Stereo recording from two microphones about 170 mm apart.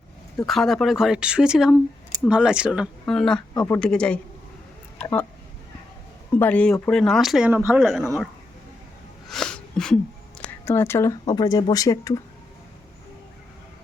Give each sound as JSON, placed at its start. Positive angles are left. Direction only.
{"t": 0.4, "sound": "speech", "side_deg": 0}
{"t": 6.3, "sound": "speech", "side_deg": 10}
{"t": 9.3, "sound": "sneeze", "side_deg": 5}
{"t": 10.4, "sound": "speech", "side_deg": 15}